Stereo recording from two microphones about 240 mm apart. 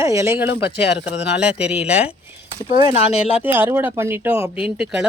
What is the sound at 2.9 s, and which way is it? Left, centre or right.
Speech, left.